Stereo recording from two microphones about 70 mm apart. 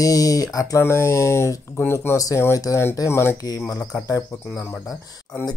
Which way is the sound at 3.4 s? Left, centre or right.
Left.